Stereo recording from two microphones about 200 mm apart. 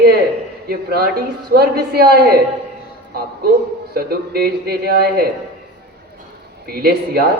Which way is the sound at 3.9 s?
50° right (ahead or behind).